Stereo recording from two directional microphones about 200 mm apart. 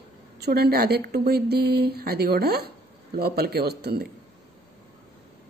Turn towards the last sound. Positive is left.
turn(degrees=-50)  # may be behind; listen again after turning